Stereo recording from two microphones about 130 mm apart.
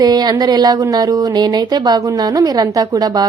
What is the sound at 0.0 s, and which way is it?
A woman's voice, 30° right (ahead or behind).